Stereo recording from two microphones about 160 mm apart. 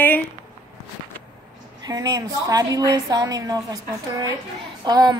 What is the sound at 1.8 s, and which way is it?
A woman's voice, 25° right (ahead or behind).